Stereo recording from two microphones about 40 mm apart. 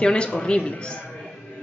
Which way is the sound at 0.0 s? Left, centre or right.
Left.